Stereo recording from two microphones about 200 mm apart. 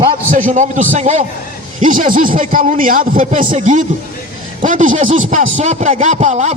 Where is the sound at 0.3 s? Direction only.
40° right (ahead or behind).